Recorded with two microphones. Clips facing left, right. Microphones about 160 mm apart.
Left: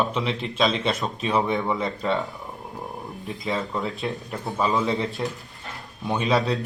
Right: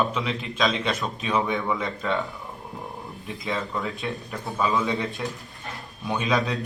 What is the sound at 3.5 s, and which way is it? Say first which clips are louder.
A man's voice: left 1 dB; 20° left (ahead or behind).